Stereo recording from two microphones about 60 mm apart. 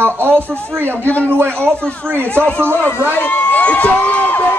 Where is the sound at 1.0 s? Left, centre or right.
Left.